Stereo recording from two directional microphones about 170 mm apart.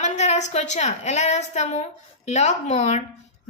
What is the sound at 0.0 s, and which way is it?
A woman's voice, 45° left (ahead or behind).